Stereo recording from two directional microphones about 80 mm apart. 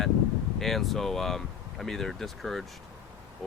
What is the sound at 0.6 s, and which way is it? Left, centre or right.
Speech, centre.